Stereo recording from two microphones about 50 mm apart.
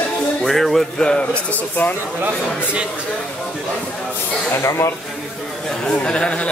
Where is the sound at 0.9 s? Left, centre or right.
Centre.